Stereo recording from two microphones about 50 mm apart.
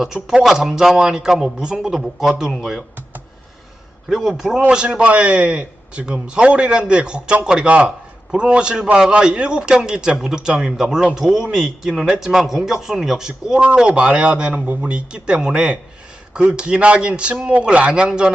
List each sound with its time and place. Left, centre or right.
0.0 s a man's voice: centre
4.1 s a man's voice: centre
10.7 s a man's voice: centre; by 18.1 s right